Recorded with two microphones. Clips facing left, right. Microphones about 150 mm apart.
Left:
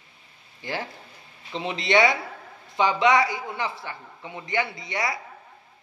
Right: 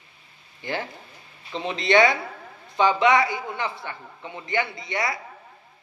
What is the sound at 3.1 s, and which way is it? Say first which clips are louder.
A man's voice: right 1 dB; 25° right (ahead or behind).